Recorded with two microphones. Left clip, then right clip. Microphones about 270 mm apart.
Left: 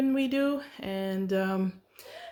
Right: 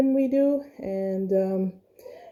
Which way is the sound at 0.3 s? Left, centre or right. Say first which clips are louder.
Right 6 dB; left.